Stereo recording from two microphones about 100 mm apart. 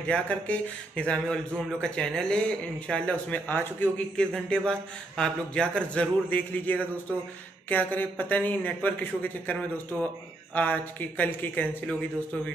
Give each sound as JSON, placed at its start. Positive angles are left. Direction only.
{"t": 0.1, "sound": "a man's voice", "side_deg": 10}
{"t": 4.3, "sound": "a man's voice", "side_deg": 5}